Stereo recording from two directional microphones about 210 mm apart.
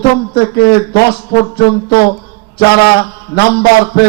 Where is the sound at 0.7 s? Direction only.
50° left (ahead or behind).